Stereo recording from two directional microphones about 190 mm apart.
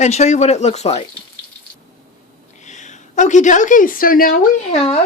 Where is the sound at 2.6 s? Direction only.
40° left (ahead or behind).